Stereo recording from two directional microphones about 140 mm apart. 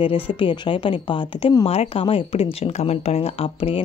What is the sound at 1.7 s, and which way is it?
Speech, 45° left (ahead or behind).